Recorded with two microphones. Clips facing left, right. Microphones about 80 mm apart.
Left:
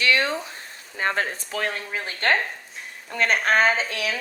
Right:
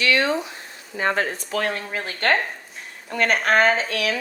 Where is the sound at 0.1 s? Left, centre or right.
Right.